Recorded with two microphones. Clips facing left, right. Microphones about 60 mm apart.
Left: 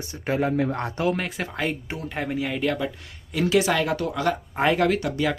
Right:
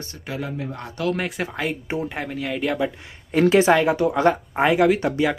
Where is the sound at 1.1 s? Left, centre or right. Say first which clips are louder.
Right 2 dB; centre.